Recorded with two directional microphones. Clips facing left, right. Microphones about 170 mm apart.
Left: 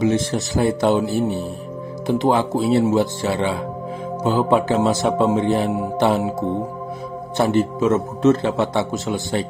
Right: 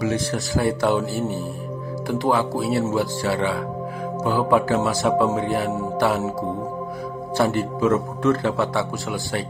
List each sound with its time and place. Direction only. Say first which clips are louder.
0.0 s speech: left 4 dB; 20° left (ahead or behind)
7.3 s speech: left 3 dB; 20° left (ahead or behind)